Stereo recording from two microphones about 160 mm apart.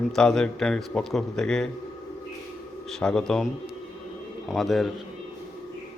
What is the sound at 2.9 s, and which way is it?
Speech, 5° left (ahead or behind).